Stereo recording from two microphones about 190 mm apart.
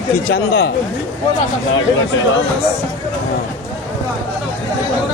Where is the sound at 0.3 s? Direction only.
90° left.